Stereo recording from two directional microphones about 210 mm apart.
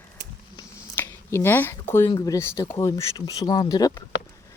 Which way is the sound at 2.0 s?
15° left (ahead or behind).